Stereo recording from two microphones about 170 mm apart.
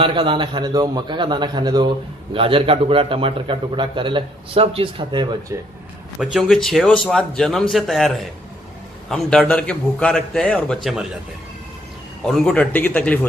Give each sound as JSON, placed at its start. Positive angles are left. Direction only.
{"t": 0.0, "sound": "a man's voice", "side_deg": -30}
{"t": 6.1, "sound": "a man's voice", "side_deg": 0}
{"t": 12.2, "sound": "a man's voice", "side_deg": 5}